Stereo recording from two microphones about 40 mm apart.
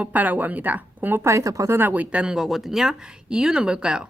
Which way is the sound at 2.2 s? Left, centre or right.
Centre.